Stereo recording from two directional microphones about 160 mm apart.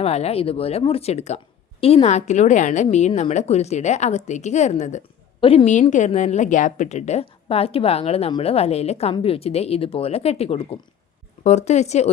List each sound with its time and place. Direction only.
0.0 s a woman's voice: 40° left (ahead or behind)
5.4 s a woman's voice: 35° left (ahead or behind)
5.9 s a woman's voice: 50° left (ahead or behind)